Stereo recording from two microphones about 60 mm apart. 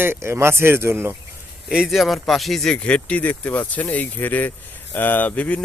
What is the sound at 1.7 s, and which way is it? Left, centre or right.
Speech, centre.